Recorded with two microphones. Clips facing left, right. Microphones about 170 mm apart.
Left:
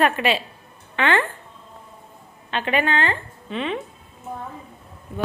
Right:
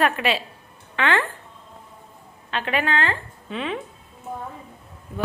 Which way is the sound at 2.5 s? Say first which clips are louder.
Left 2 dB; centre (ahead or behind).